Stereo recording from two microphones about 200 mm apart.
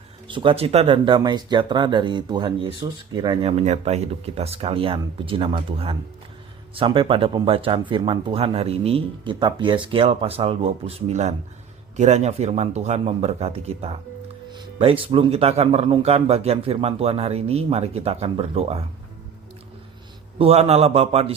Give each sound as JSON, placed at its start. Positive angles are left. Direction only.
{"t": 0.3, "sound": "speech", "side_deg": -25}
{"t": 3.4, "sound": "speech", "side_deg": -35}
{"t": 20.4, "sound": "speech", "side_deg": -30}